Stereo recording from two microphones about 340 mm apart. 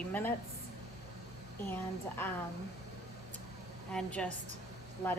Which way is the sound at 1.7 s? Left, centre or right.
Centre.